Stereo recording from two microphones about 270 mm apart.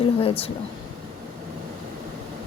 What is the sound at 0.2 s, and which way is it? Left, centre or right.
Speech, left.